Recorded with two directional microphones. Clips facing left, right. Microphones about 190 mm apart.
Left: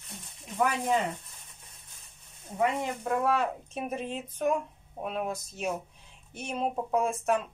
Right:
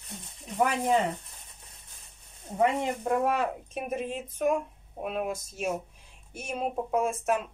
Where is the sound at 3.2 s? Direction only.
15° right (ahead or behind).